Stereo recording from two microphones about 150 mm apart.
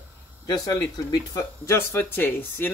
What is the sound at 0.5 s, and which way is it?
Speech, 25° left (ahead or behind).